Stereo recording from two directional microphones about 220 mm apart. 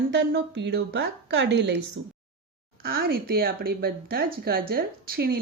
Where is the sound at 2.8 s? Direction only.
45° right (ahead or behind).